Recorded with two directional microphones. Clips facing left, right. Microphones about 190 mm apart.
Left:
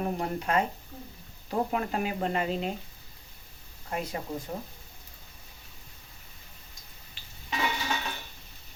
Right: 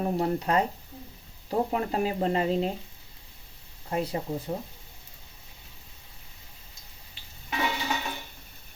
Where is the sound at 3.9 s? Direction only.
30° right (ahead or behind).